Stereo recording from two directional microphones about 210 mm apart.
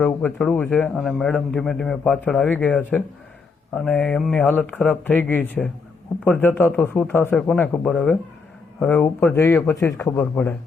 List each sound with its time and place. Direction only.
0.0 s a man's voice: 10° left (ahead or behind)